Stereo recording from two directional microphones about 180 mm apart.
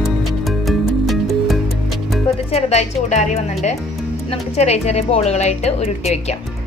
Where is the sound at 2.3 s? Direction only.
35° left (ahead or behind).